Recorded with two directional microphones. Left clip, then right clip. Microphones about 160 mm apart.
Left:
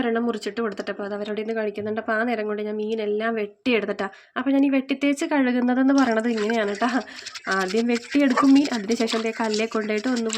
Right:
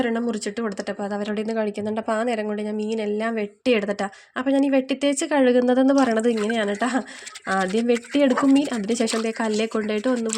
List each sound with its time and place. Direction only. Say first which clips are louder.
0.0 s speech: even; 55° right (ahead or behind)
8.1 s speech: left 2 dB; 45° right (ahead or behind)